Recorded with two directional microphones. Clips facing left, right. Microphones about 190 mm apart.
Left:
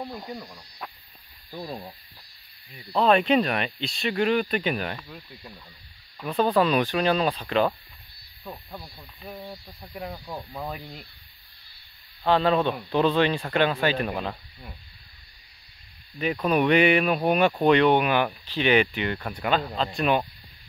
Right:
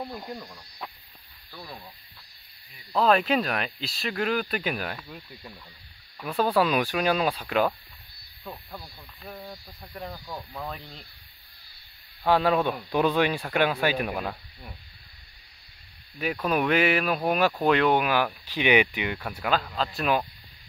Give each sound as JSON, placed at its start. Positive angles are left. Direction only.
{"t": 0.0, "sound": "speech", "side_deg": 0}
{"t": 1.6, "sound": "speech", "side_deg": 35}
{"t": 3.0, "sound": "speech", "side_deg": 0}
{"t": 8.5, "sound": "speech", "side_deg": 5}
{"t": 12.3, "sound": "speech", "side_deg": -10}
{"t": 16.3, "sound": "speech", "side_deg": 0}